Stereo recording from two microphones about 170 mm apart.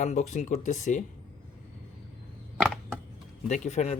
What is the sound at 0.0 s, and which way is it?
Speech, 45° left (ahead or behind).